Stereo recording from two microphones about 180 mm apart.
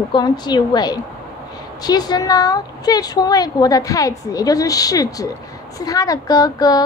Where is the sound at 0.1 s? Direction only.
25° left (ahead or behind).